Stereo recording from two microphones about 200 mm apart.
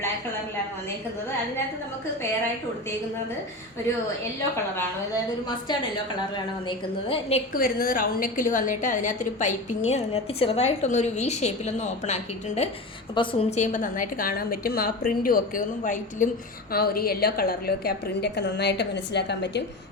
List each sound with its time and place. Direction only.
4.5 s a woman's voice: 15° left (ahead or behind)
7.5 s a woman's voice: 45° left (ahead or behind)